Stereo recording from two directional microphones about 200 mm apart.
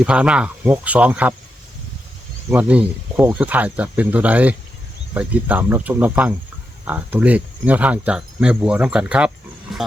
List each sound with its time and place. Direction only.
0.0 s speech: 5° right (ahead or behind)
2.5 s speech: 10° right (ahead or behind)
9.7 s roaring cats: centre (ahead or behind)